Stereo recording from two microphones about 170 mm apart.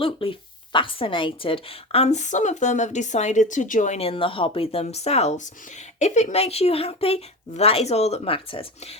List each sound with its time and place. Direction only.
0.0 s a woman's voice: 30° left (ahead or behind)